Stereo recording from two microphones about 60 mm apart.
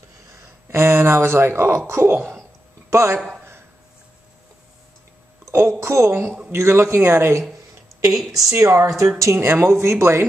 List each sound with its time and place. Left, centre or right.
0.3 s speech: right
5.4 s a woman's voice: right
8.5 s speech: right